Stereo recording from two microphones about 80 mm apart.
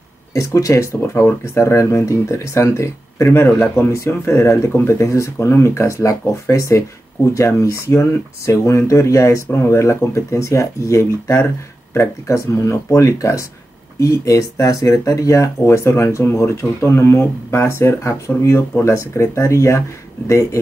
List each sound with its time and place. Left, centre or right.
0.3 s speech: left